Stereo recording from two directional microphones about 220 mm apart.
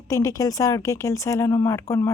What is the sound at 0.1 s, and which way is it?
A woman's voice, 15° left (ahead or behind).